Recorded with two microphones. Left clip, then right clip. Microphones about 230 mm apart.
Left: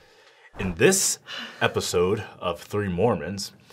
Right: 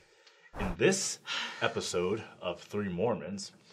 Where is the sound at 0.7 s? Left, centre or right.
Left.